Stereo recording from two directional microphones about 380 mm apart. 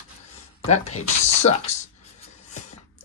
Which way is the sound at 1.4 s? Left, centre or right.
Centre.